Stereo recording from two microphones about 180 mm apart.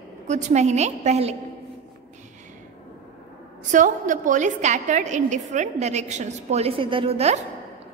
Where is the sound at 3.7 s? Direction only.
45° right (ahead or behind).